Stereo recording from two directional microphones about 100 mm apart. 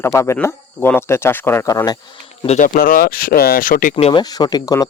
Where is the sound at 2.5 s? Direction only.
90° left.